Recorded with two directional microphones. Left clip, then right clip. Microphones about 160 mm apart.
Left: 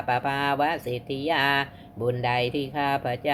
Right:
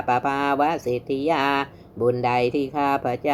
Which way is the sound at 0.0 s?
40° right (ahead or behind).